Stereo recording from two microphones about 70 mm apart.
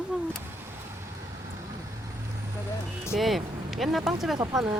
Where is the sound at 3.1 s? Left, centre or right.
Centre.